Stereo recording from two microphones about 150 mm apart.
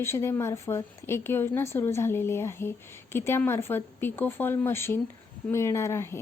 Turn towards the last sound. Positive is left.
turn(degrees=15)  # may be behind; listen again after turning